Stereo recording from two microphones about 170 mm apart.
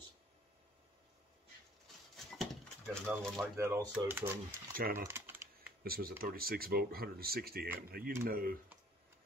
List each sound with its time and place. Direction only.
2.9 s speech: centre (ahead or behind)
3.5 s speech: 15° right (ahead or behind)
4.5 s speech: 55° right (ahead or behind)
4.9 s typing: 15° right (ahead or behind)
5.9 s speech: 60° right (ahead or behind)